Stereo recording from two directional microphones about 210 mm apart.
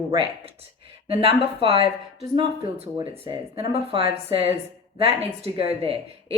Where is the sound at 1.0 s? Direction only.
25° right (ahead or behind).